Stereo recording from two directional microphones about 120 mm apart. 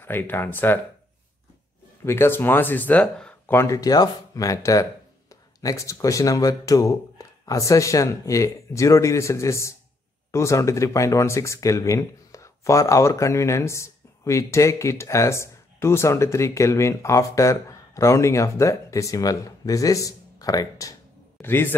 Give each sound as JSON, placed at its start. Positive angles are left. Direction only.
{"t": 0.0, "sound": "speech", "side_deg": 15}
{"t": 2.0, "sound": "speech", "side_deg": 20}
{"t": 3.5, "sound": "speech", "side_deg": 25}
{"t": 21.4, "sound": "a man's voice", "side_deg": 20}